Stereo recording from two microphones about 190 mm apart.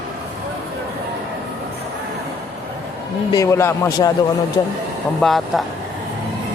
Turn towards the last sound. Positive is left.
turn(degrees=0)  # may be behind; listen again after turning